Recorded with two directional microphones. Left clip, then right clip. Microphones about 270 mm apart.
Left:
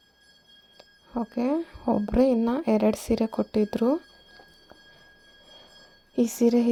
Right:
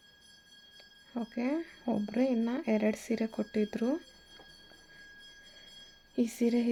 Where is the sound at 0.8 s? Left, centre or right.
Centre.